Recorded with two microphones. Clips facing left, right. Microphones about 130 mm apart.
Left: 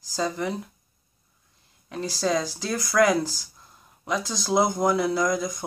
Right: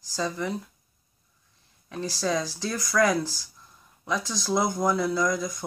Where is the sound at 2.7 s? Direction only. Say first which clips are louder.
Left 3 dB; 20° left (ahead or behind).